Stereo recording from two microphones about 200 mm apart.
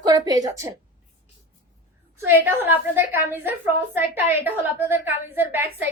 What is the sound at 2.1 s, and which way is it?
A woman's voice, 10° right (ahead or behind).